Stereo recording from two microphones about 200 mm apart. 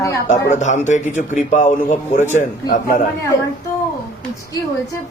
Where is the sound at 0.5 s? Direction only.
35° left (ahead or behind).